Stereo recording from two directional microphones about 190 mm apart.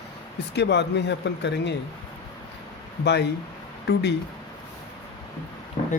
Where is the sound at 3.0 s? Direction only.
60° left (ahead or behind).